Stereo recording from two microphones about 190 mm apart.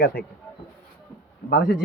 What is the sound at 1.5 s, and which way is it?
Speech, 50° left (ahead or behind).